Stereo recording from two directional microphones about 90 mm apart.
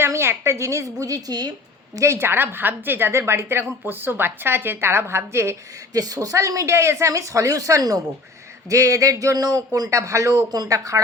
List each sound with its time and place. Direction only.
0.0 s a man's voice: 30° right (ahead or behind); by 1.5 s 45° right (ahead or behind)
2.0 s a woman's voice: 30° right (ahead or behind)
6.0 s a man's voice: 40° right (ahead or behind)